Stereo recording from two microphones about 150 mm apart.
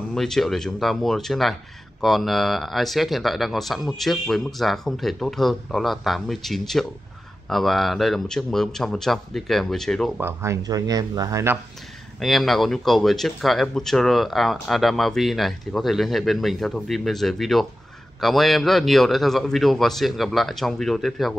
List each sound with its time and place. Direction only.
0.1 s speech: 5° left (ahead or behind)
10.1 s speech: 15° right (ahead or behind)
12.2 s speech: centre (ahead or behind)